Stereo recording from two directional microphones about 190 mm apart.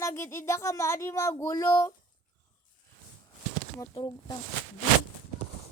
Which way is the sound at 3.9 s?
25° left (ahead or behind).